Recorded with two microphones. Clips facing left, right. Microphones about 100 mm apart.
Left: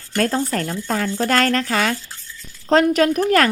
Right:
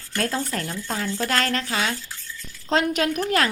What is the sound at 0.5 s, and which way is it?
Speech, 50° left (ahead or behind).